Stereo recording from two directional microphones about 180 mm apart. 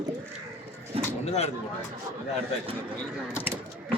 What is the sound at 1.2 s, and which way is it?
Speech, 35° left (ahead or behind).